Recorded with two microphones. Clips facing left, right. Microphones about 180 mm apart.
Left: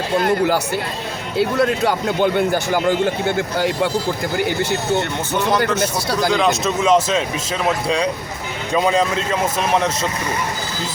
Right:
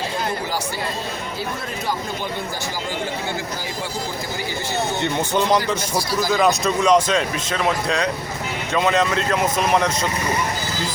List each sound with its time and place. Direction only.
0.2 s speech: 65° left (ahead or behind)
6.3 s speech: centre (ahead or behind)